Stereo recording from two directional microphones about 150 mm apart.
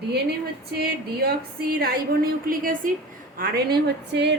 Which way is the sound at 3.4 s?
90° right.